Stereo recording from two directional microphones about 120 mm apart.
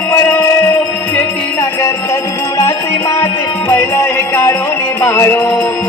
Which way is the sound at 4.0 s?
25° left (ahead or behind).